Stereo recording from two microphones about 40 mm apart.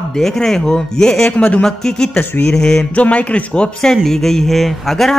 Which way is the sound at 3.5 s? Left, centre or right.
Centre.